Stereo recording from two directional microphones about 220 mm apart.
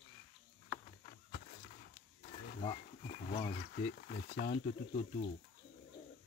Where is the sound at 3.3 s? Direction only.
30° left (ahead or behind).